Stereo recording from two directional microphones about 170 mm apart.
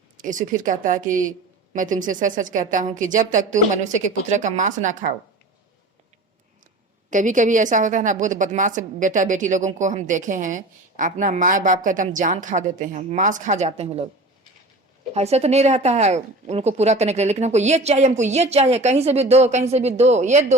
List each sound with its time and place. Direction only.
0.2 s a woman's voice: 50° right (ahead or behind)
7.1 s a woman's voice: 50° right (ahead or behind)
15.1 s a woman's voice: 40° right (ahead or behind)